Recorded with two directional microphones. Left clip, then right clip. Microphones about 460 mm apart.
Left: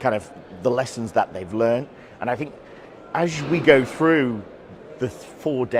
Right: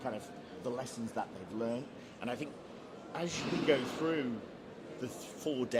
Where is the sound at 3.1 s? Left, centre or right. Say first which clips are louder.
Left 15 dB; left.